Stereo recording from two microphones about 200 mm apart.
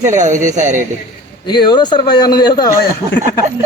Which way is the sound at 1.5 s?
20° left (ahead or behind).